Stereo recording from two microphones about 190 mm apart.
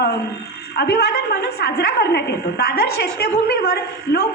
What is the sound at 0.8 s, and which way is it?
A woman's voice, 60° left (ahead or behind).